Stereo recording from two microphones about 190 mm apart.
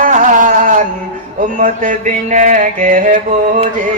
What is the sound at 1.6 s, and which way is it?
Mantra, 40° right (ahead or behind).